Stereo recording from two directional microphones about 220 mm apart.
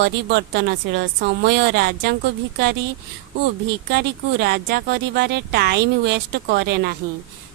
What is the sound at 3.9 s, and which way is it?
Speech, 50° right (ahead or behind).